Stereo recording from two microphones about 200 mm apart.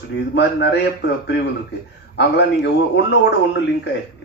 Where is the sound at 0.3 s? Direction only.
60° left (ahead or behind).